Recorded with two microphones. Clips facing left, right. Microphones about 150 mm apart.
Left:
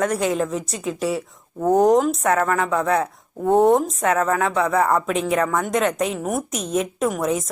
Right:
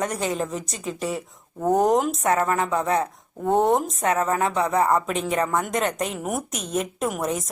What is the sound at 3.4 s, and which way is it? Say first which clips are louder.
Speech: left 4 dB; centre (ahead or behind).